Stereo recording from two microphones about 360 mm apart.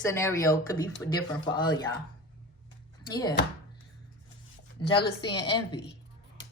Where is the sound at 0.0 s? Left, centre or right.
Centre.